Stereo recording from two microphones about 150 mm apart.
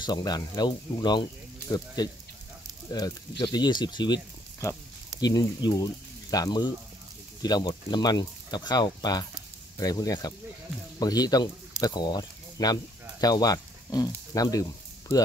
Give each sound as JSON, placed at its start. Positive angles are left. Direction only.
{"t": 0.0, "sound": "speech", "side_deg": 30}